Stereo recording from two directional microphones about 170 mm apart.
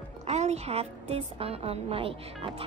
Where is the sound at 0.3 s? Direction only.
40° right (ahead or behind).